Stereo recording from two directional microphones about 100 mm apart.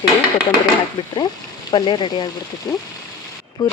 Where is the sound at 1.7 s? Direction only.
45° left (ahead or behind).